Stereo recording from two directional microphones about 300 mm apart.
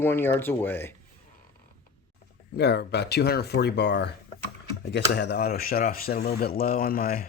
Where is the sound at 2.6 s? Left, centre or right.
Left.